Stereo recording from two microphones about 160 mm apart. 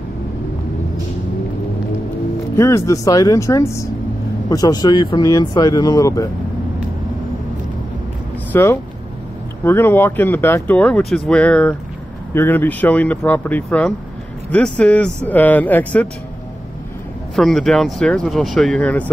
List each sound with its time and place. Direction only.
2.5 s speech: 20° left (ahead or behind)
8.5 s speech: 15° left (ahead or behind)
17.4 s speech: centre (ahead or behind)